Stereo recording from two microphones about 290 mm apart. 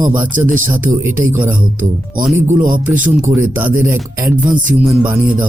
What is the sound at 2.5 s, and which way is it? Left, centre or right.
Speech, right.